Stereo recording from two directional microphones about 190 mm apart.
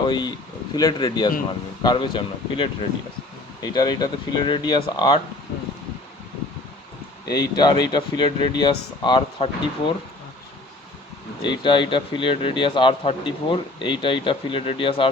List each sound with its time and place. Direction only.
0.1 s speech: 20° left (ahead or behind)
7.3 s speech: 20° left (ahead or behind)
11.4 s speech: 25° left (ahead or behind)